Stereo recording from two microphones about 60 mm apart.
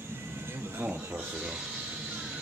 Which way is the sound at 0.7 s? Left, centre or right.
Right.